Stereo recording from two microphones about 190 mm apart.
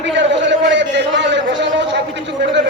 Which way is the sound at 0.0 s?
70° right (ahead or behind).